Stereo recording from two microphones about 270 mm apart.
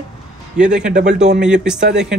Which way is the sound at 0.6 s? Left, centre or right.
Right.